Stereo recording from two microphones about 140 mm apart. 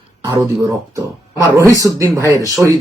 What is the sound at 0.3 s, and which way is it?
Speech, 20° right (ahead or behind).